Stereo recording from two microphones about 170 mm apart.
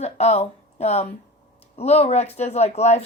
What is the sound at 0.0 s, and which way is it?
Speech, 40° left (ahead or behind).